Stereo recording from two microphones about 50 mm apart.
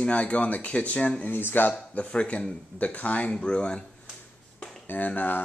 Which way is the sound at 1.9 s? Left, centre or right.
Left.